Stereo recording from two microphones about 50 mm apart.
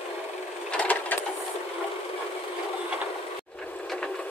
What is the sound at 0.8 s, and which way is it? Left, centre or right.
Wood, left.